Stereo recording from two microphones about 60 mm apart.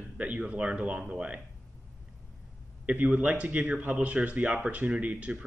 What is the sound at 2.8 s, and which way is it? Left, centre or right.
Speech, right.